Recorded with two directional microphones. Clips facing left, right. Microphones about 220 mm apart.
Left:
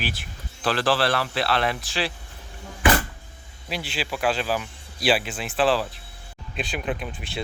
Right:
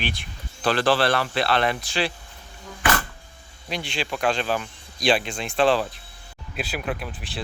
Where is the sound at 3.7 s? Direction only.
5° left (ahead or behind).